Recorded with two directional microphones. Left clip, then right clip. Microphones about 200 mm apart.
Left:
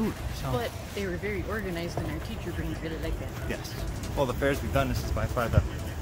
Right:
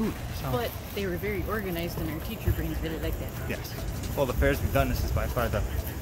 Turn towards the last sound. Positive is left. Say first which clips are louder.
# even
turn(degrees=15)  # may be behind; listen again after turning